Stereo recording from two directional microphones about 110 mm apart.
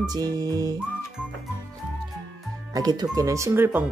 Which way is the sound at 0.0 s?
35° right (ahead or behind).